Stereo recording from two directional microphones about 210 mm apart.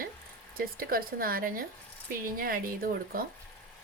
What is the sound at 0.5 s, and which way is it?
Speech, 45° right (ahead or behind).